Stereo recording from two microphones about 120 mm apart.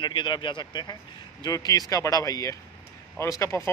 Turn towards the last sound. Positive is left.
turn(degrees=25)  # may be behind; listen again after turning